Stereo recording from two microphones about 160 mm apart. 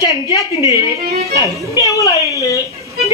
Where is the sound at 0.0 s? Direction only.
25° left (ahead or behind).